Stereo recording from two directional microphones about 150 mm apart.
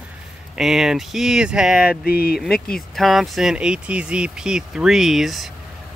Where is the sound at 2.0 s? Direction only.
90° left.